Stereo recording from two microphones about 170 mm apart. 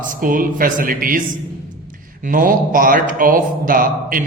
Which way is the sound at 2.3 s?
55° right (ahead or behind).